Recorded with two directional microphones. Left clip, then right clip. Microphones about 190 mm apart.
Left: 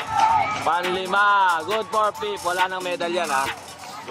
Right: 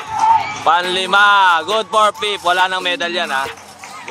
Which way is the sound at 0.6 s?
20° right (ahead or behind).